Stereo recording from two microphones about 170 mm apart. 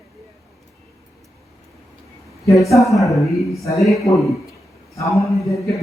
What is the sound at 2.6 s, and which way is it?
A man's voice, 20° left (ahead or behind).